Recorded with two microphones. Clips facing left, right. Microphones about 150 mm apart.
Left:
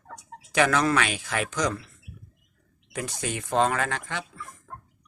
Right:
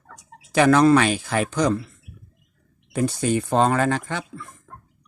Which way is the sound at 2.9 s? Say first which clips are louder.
Right 10 dB; 35° right (ahead or behind).